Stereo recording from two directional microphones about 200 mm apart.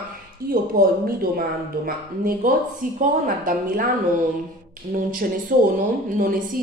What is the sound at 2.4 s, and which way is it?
Speech, 45° right (ahead or behind).